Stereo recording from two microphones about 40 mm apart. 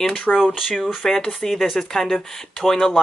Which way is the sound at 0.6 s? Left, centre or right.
Centre.